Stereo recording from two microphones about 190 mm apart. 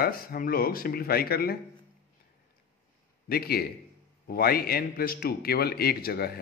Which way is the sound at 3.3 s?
55° left (ahead or behind).